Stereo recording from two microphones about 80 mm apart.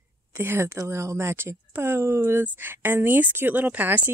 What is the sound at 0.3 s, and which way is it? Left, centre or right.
A woman's voice, right.